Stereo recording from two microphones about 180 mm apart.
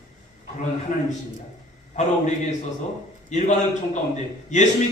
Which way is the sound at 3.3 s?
40° left (ahead or behind).